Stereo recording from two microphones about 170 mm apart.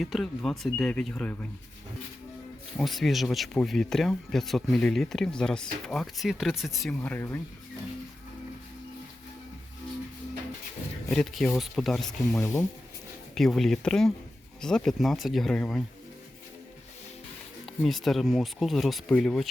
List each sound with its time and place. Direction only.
0.0 s speech: centre (ahead or behind)
2.7 s speech: centre (ahead or behind)
11.1 s speech: centre (ahead or behind)
12.4 s speech: 15° left (ahead or behind)
13.3 s speech: centre (ahead or behind)
17.7 s speech: centre (ahead or behind)